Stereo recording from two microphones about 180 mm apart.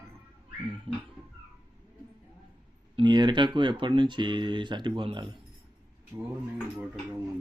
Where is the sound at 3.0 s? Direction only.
25° right (ahead or behind).